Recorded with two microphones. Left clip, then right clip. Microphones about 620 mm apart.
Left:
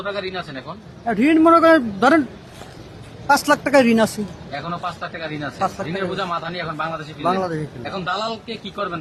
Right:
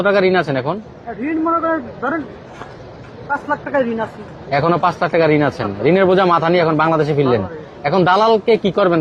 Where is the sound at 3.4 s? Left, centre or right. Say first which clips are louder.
Left 1 dB; left.